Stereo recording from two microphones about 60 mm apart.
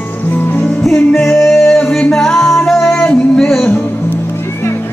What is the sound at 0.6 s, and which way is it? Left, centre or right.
Music, centre.